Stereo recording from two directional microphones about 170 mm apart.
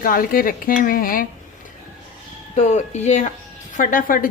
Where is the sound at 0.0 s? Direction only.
55° left (ahead or behind).